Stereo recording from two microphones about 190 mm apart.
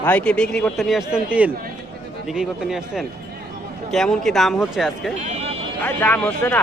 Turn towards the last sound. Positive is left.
turn(degrees=5)  # may be behind; listen again after turning